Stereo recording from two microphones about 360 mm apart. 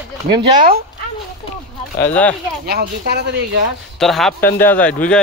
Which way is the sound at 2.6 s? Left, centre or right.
Right.